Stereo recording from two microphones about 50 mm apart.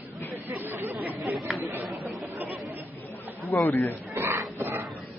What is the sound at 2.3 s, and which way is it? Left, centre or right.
Chatter, right.